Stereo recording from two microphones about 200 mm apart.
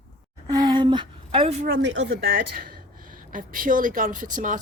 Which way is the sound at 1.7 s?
65° right (ahead or behind).